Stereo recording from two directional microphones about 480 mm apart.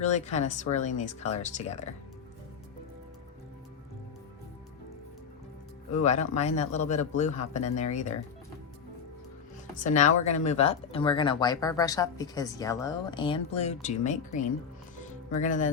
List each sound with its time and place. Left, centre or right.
0.0 s speech: centre
5.9 s speech: centre
9.7 s speech: centre